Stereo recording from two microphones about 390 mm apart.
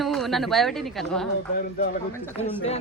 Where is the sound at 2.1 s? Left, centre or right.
Centre.